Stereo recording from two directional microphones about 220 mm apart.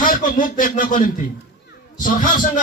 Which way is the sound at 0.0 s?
40° left (ahead or behind).